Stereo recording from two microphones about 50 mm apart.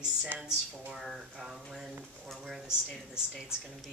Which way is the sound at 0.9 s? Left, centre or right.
Centre.